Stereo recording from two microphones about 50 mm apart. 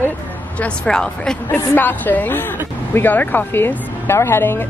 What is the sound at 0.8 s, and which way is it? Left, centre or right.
Speech, centre.